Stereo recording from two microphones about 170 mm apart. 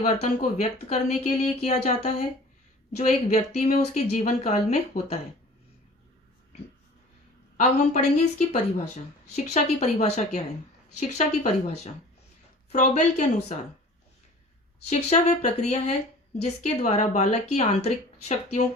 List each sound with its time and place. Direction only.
0.0 s speech: 45° left (ahead or behind)
7.5 s speech: 45° left (ahead or behind)
14.8 s speech: 45° left (ahead or behind)